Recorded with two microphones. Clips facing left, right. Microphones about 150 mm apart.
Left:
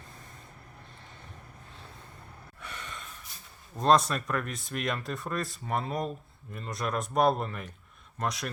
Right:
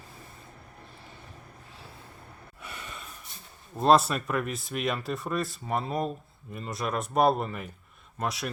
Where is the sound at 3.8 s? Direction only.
5° right (ahead or behind).